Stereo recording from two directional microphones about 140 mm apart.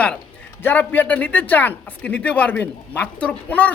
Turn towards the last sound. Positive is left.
turn(degrees=10)  # may be behind; listen again after turning